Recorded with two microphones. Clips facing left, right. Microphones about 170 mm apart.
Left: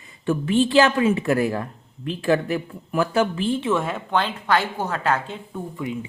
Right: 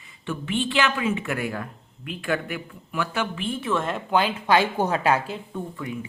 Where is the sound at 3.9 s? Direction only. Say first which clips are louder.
Right 1 dB; 10° right (ahead or behind).